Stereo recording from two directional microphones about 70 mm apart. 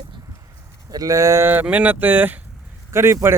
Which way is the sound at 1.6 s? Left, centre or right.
Right.